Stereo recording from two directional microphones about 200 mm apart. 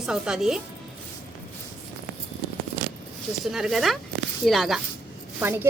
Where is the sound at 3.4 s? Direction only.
Centre (ahead or behind).